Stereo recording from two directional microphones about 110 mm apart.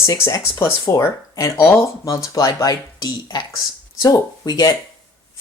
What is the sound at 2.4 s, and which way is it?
Speech, 35° left (ahead or behind).